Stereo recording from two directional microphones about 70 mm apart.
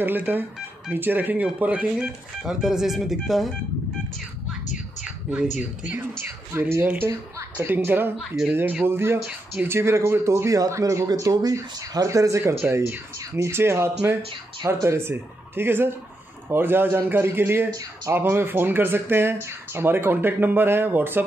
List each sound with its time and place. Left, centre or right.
0.2 s speech: right
2.6 s speech: centre
5.0 s a woman's voice: centre
6.5 s speech: right
8.2 s a man's voice: centre
8.8 s speech: right
11.1 s speech: right